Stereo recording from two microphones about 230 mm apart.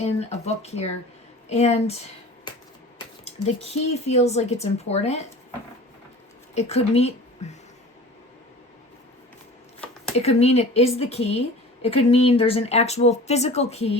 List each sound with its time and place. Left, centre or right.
0.0 s a woman's voice: left
2.5 s finger snapping: centre
3.2 s a woman's voice: left
6.5 s a woman's voice: left
10.2 s a woman's voice: left